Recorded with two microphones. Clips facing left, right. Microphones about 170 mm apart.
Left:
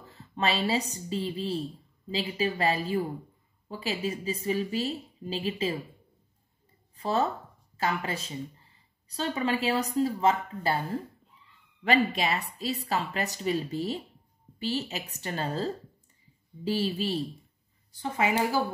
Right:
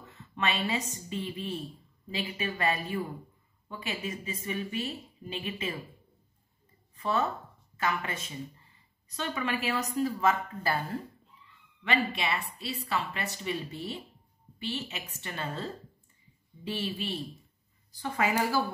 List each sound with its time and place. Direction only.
0.0 s a woman's voice: 35° left (ahead or behind)
7.0 s a woman's voice: 35° left (ahead or behind)
11.8 s a woman's voice: 40° left (ahead or behind)
18.1 s a woman's voice: 20° left (ahead or behind)